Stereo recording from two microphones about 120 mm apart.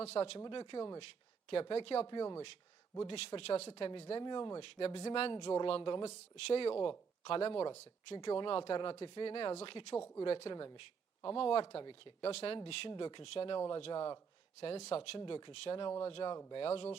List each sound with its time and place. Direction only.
0.0 s speech: 60° left (ahead or behind)
0.3 s speech: 40° left (ahead or behind)
4.2 s speech: 40° left (ahead or behind); by 5.3 s 55° left (ahead or behind)
5.3 s speech: 40° left (ahead or behind)
12.3 s speech: 55° left (ahead or behind)
12.9 s speech: 45° left (ahead or behind)
14.6 s speech: 55° left (ahead or behind)